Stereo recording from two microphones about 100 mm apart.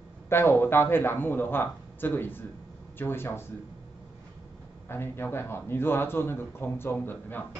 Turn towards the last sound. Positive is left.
turn(degrees=20)  # may be behind; listen again after turning